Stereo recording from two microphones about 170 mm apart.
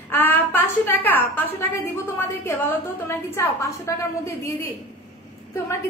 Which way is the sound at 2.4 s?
15° left (ahead or behind).